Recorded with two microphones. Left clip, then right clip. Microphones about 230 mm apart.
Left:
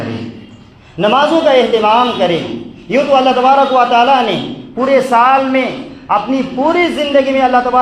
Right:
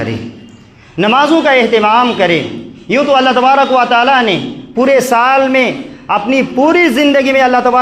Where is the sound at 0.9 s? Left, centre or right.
Right.